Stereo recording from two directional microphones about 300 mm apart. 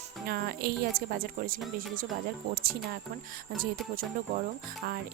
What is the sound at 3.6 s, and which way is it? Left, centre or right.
Speech, right.